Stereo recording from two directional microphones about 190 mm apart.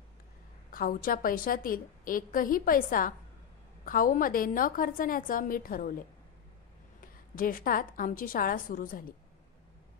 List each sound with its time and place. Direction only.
0.7 s a woman's voice: 50° left (ahead or behind)
7.3 s a woman's voice: 50° left (ahead or behind)